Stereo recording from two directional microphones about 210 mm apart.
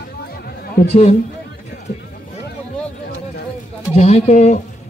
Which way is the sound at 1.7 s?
40° left (ahead or behind).